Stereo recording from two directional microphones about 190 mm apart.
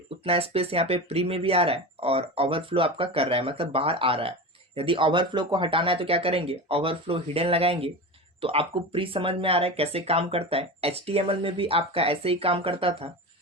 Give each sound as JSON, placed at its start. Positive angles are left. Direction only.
{"t": 0.3, "sound": "speech", "side_deg": -30}